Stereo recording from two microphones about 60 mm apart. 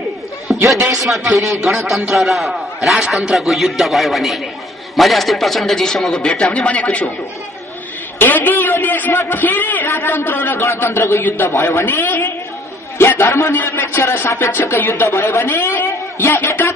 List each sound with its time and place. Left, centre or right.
0.5 s a sound: centre
0.8 s a man's voice: centre
6.2 s a man's voice: centre
8.2 s a sound: left
9.3 s a man's voice: left
9.8 s music: left
11.5 s a man's voice: left
11.8 s music: left
12.9 s a man's voice: left
13.5 s music: left
15.0 s music: left